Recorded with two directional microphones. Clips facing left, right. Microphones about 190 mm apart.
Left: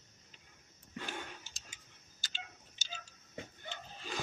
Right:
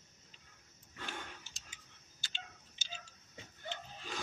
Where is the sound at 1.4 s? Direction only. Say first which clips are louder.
Left 2 dB; 40° left (ahead or behind).